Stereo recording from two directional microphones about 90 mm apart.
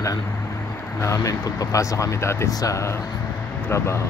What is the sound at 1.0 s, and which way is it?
Speech, 35° left (ahead or behind).